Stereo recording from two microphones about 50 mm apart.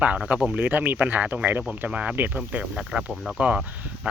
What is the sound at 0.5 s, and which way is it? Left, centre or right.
Speech, right.